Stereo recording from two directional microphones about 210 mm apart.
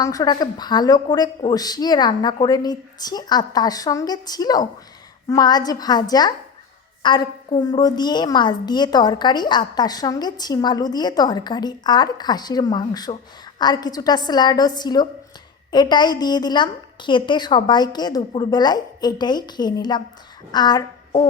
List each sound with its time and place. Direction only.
0.0 s a woman's voice: 15° left (ahead or behind)